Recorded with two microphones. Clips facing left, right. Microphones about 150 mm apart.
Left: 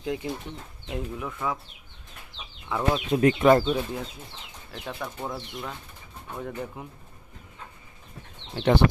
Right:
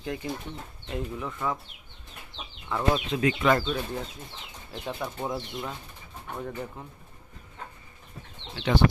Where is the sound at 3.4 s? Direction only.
45° left (ahead or behind).